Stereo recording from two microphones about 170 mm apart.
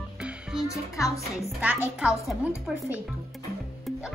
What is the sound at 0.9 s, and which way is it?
Speech, 20° left (ahead or behind).